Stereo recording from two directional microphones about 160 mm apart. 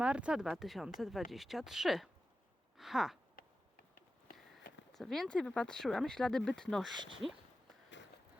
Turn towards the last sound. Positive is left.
turn(degrees=-35)  # may be behind; listen again after turning